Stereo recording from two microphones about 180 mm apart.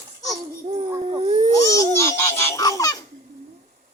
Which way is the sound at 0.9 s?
30° right (ahead or behind).